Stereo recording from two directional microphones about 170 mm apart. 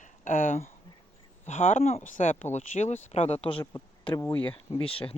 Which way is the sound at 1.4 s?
45° left (ahead or behind).